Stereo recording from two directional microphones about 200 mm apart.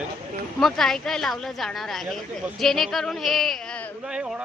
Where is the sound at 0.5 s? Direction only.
Centre (ahead or behind).